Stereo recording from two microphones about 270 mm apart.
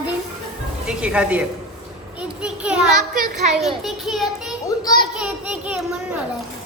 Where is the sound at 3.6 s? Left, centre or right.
Centre.